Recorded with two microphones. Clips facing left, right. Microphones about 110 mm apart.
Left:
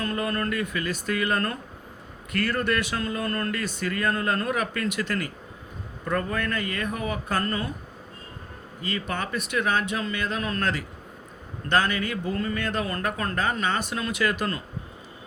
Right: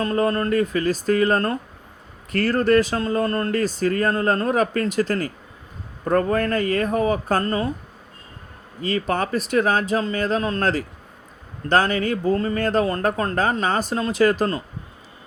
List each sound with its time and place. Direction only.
0.0 s speech: 30° right (ahead or behind)
8.9 s speech: 40° right (ahead or behind)